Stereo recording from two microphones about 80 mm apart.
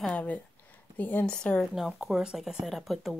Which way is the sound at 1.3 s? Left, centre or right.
Centre.